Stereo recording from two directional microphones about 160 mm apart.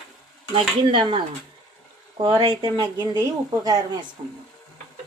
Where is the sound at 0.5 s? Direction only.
30° right (ahead or behind).